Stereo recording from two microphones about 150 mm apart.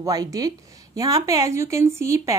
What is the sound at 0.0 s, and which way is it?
Speech, 25° right (ahead or behind).